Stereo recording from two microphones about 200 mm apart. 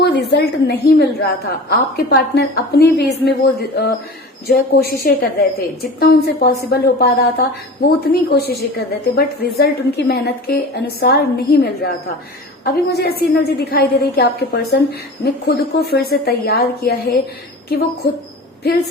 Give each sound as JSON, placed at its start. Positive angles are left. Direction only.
{"t": 0.0, "sound": "a woman's voice", "side_deg": 60}